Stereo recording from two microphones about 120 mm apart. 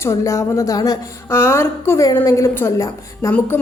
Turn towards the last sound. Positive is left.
turn(degrees=25)  # may be behind; listen again after turning